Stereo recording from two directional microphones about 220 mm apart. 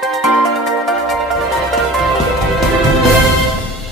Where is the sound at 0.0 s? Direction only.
Centre (ahead or behind).